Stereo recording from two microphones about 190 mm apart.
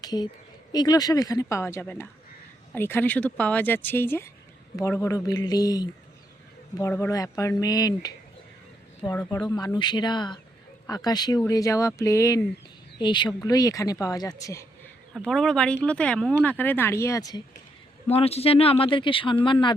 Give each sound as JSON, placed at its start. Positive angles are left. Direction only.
{"t": 0.0, "sound": "speech", "side_deg": 20}
{"t": 9.1, "sound": "speech", "side_deg": 10}
{"t": 15.1, "sound": "speech", "side_deg": 0}
{"t": 18.1, "sound": "speech", "side_deg": 30}